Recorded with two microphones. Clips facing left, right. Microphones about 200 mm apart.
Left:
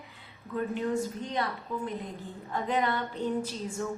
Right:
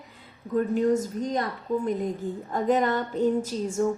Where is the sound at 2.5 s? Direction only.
45° right (ahead or behind).